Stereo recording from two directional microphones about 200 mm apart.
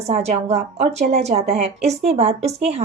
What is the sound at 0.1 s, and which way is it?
A woman's voice, 30° right (ahead or behind).